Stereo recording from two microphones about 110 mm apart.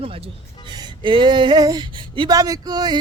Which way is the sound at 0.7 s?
40° right (ahead or behind).